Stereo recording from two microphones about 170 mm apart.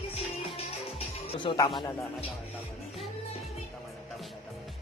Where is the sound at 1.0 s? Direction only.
30° left (ahead or behind).